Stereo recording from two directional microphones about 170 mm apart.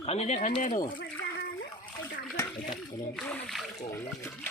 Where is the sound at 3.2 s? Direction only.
10° left (ahead or behind).